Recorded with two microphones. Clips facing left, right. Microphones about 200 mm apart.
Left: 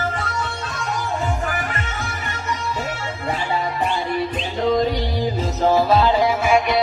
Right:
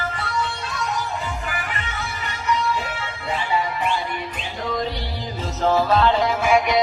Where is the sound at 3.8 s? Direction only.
35° left (ahead or behind); by 6.6 s 5° left (ahead or behind).